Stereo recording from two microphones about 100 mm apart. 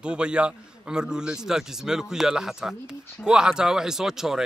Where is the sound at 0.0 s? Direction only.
10° right (ahead or behind).